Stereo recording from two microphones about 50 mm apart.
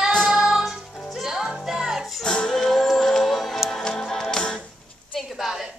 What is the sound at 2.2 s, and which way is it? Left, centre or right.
Music, centre.